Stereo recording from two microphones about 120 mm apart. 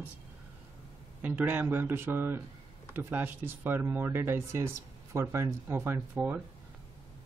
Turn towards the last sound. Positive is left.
turn(degrees=-15)  # may be behind; listen again after turning